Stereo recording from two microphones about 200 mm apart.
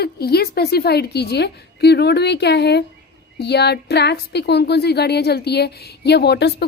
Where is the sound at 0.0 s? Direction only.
50° left (ahead or behind).